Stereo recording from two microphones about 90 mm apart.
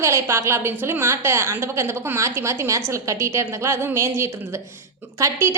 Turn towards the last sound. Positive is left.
turn(degrees=-30)  # may be behind; listen again after turning